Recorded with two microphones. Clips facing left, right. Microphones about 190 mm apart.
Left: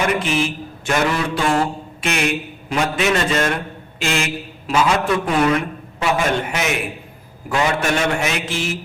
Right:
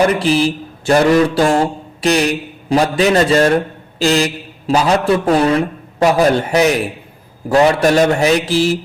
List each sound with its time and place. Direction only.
0.0 s a man's voice: 35° right (ahead or behind)